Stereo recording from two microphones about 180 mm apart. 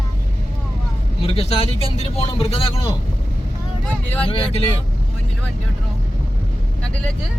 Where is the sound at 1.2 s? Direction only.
35° left (ahead or behind).